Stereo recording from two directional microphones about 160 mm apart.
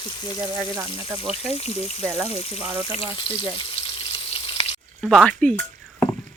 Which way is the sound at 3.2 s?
30° left (ahead or behind).